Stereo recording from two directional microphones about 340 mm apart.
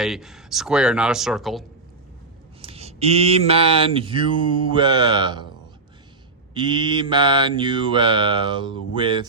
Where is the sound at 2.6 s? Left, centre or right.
Centre.